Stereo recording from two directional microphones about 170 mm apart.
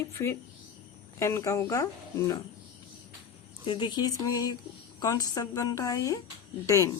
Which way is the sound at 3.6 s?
30° left (ahead or behind).